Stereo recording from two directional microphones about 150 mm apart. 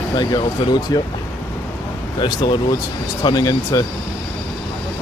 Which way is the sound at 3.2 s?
25° left (ahead or behind).